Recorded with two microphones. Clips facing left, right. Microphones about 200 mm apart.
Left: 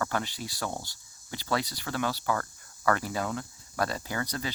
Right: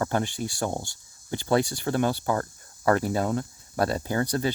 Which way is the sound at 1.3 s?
50° right (ahead or behind).